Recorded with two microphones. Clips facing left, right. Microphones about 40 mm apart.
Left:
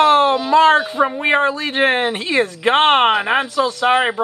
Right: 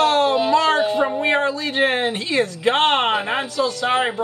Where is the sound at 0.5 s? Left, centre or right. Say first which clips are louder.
Left 8 dB; left.